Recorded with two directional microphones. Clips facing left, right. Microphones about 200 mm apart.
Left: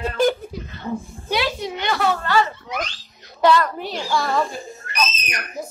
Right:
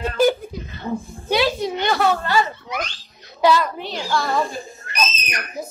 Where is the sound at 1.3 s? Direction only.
40° right (ahead or behind).